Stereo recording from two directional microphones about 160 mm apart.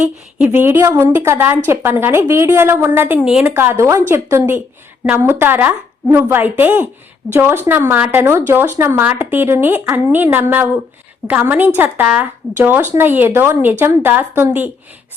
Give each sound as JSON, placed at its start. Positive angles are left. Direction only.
{"t": 0.0, "sound": "a woman's voice", "side_deg": -10}